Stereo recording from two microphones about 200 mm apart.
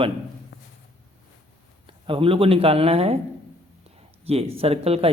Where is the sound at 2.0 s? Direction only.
25° right (ahead or behind).